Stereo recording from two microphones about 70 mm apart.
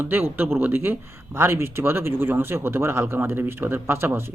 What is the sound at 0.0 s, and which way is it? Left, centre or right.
Speech, right.